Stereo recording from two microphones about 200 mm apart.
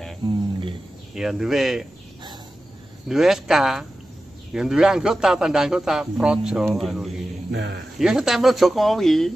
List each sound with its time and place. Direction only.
0.2 s speech: 20° right (ahead or behind)
1.1 s a man's voice: centre (ahead or behind)
3.1 s a man's voice: centre (ahead or behind)
7.5 s speech: 60° right (ahead or behind)
8.0 s a man's voice: centre (ahead or behind)